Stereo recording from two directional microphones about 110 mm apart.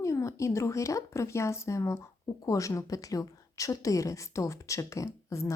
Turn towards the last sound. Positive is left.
turn(degrees=30)  # may be behind; listen again after turning